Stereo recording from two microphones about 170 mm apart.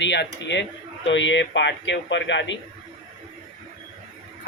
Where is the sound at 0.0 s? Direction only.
90° left.